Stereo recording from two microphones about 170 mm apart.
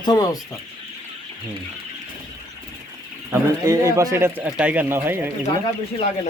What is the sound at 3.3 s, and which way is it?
A man's voice, 15° right (ahead or behind).